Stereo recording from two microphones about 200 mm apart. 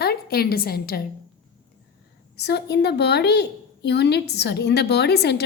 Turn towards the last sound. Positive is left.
turn(degrees=55)  # may be behind; listen again after turning